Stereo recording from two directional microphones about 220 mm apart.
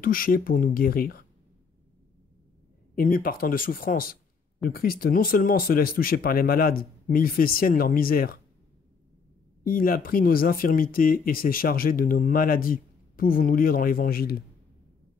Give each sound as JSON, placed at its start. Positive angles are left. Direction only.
{"t": 0.0, "sound": "speech", "side_deg": 40}
{"t": 3.0, "sound": "speech", "side_deg": 40}
{"t": 9.7, "sound": "speech", "side_deg": 40}